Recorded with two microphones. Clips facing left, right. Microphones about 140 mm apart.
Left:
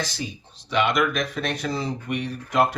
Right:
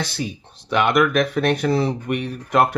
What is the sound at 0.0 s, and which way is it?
Speech, 65° right (ahead or behind).